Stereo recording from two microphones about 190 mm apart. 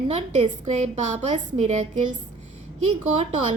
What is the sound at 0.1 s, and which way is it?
A woman's voice, 35° right (ahead or behind).